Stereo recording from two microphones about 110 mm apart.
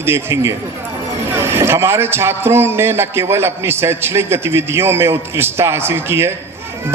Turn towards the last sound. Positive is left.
turn(degrees=-20)  # may be behind; listen again after turning